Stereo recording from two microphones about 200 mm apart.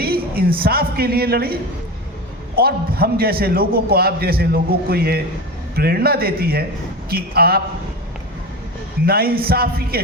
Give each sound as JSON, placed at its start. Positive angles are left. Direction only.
{"t": 0.0, "sound": "a man's voice", "side_deg": -50}
{"t": 2.6, "sound": "a man's voice", "side_deg": -50}
{"t": 9.0, "sound": "a man's voice", "side_deg": -50}